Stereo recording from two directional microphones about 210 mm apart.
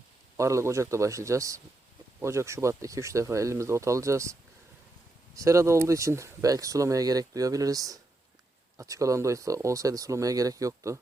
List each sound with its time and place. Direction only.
0.3 s speech: 15° right (ahead or behind)
5.4 s speech: 15° right (ahead or behind)